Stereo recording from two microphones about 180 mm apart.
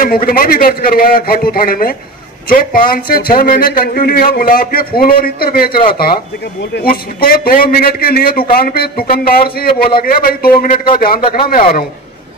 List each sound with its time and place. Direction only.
0.0 s a man's voice: 50° left (ahead or behind)